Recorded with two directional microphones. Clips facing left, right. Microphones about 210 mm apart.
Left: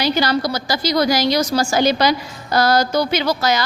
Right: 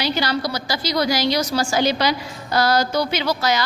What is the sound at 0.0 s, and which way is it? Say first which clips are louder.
A woman's voice: left 4 dB; 45° left (ahead or behind).